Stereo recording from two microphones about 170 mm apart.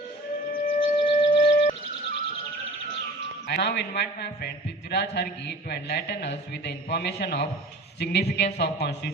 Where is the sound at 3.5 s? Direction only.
80° left.